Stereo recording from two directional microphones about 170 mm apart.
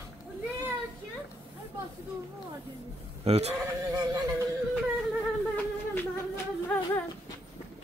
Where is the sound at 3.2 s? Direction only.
40° right (ahead or behind).